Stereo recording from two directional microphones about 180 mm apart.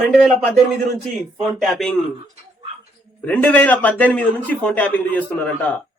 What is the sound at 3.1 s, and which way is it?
Speech, 10° left (ahead or behind).